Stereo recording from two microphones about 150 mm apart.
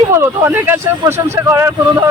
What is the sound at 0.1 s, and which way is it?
Speech, 15° right (ahead or behind).